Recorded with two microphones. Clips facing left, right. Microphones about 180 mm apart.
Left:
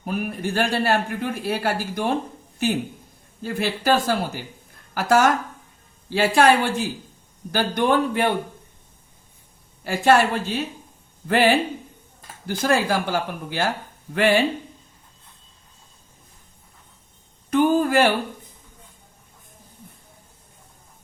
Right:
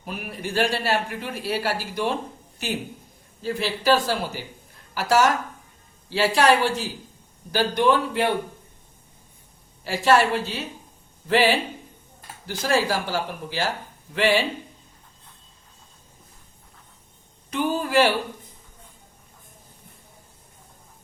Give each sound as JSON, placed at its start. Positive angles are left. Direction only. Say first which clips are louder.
{"t": 0.0, "sound": "speech", "louder": "left 6 dB", "side_deg": 50}
{"t": 3.4, "sound": "speech", "louder": "even", "side_deg": 50}
{"t": 9.8, "sound": "speech", "louder": "left 2 dB", "side_deg": 50}
{"t": 17.5, "sound": "speech", "louder": "left 5 dB", "side_deg": 50}